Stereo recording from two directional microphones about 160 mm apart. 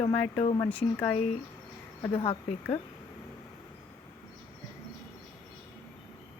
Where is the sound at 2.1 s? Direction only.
35° left (ahead or behind).